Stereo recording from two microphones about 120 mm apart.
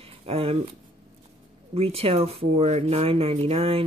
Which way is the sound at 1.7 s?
55° right (ahead or behind).